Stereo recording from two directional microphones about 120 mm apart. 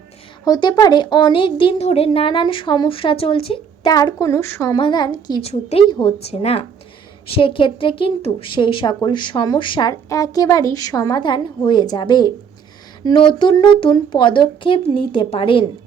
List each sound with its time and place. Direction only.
0.4 s a woman's voice: 35° left (ahead or behind)
1.8 s a woman's voice: 65° left (ahead or behind)
2.0 s a woman's voice: 45° left (ahead or behind)
3.8 s a woman's voice: 35° left (ahead or behind)
4.8 s a woman's voice: 40° left (ahead or behind)
5.4 s a woman's voice: 60° left (ahead or behind)
5.9 s a woman's voice: 45° left (ahead or behind)
10.1 s a woman's voice: 30° left (ahead or behind); by 15.6 s 45° left (ahead or behind)